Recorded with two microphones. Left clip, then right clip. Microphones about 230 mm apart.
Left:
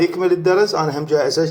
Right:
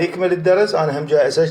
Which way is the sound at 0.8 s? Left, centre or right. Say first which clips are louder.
Right 2 dB; left.